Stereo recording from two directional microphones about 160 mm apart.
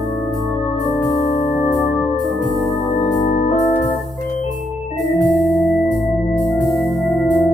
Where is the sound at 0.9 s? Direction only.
30° left (ahead or behind).